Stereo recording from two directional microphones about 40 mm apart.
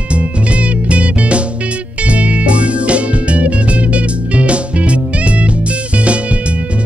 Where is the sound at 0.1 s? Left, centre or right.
Right.